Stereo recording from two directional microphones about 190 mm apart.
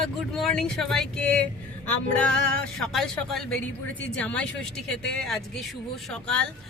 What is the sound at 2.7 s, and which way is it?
Speech, centre (ahead or behind).